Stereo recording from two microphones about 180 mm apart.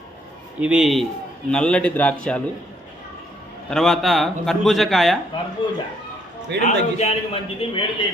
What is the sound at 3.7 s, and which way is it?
A man's voice, centre (ahead or behind).